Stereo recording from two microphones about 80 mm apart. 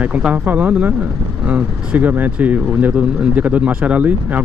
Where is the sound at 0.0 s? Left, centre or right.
Centre.